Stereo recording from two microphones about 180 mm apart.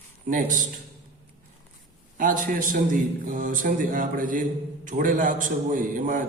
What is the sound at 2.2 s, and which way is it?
A man's voice, 50° right (ahead or behind).